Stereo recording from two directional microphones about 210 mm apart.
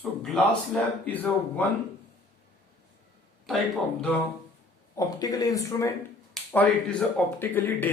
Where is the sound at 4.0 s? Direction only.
5° left (ahead or behind).